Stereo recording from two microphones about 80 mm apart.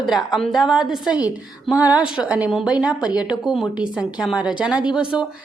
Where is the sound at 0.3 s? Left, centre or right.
Centre.